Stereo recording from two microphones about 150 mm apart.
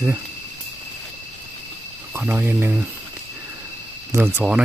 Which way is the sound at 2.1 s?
15° right (ahead or behind).